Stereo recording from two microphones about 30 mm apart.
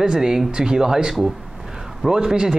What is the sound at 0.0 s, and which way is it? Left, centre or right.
Speech, centre.